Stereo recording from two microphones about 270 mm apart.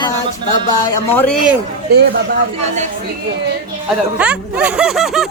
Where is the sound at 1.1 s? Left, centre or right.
Centre.